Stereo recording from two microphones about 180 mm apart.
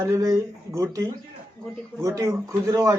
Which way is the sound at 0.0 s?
15° right (ahead or behind).